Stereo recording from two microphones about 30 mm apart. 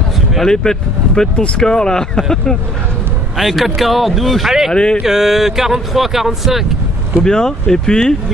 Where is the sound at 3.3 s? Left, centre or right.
Centre.